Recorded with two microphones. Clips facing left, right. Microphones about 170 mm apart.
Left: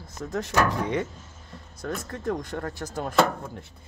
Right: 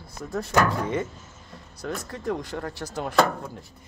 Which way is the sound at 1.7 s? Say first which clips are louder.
Even; 50° left (ahead or behind).